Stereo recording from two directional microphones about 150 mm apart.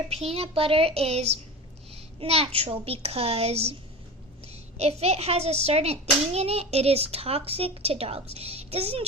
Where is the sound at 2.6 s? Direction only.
40° right (ahead or behind).